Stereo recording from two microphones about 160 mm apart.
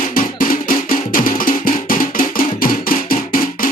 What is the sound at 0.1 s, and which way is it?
Music, 60° left (ahead or behind).